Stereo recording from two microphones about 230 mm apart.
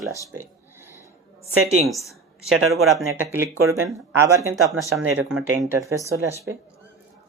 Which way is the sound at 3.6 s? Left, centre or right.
Right.